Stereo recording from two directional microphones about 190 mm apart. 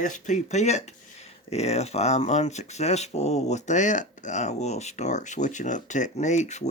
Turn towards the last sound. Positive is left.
turn(degrees=40)  # may be behind; listen again after turning